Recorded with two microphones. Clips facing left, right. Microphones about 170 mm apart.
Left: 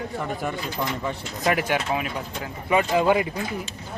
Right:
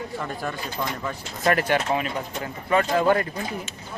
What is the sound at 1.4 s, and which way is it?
A man's voice, 10° left (ahead or behind).